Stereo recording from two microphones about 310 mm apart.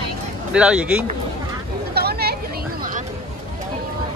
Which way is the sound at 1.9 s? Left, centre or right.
Right.